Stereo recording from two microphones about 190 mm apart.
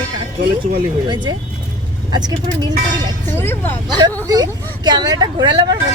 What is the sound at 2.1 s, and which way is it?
Speech, 20° right (ahead or behind).